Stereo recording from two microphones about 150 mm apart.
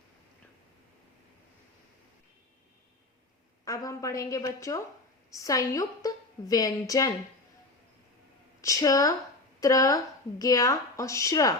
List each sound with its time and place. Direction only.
3.6 s a woman's voice: 25° left (ahead or behind)
8.6 s a woman's voice: 25° left (ahead or behind)